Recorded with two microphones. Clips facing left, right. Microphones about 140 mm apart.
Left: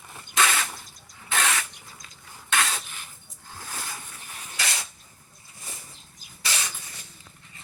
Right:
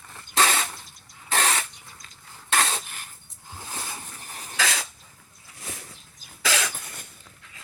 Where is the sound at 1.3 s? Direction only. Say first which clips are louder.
Right 2 dB; 35° right (ahead or behind).